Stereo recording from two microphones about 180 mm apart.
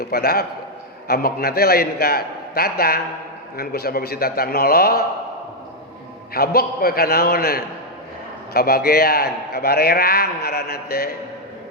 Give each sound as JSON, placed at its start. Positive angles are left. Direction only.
{"t": 0.0, "sound": "a man's voice", "side_deg": 60}
{"t": 6.3, "sound": "a man's voice", "side_deg": 55}